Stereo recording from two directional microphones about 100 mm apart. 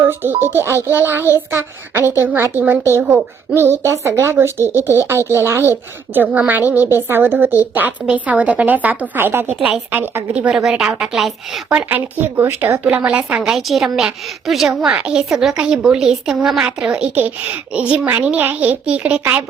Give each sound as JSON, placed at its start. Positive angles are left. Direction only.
{"t": 0.0, "sound": "a woman's voice", "side_deg": -20}
{"t": 9.6, "sound": "a woman's voice", "side_deg": -10}
{"t": 10.5, "sound": "a woman's voice", "side_deg": -5}
{"t": 11.7, "sound": "speech", "side_deg": -15}
{"t": 13.0, "sound": "a woman's voice", "side_deg": -5}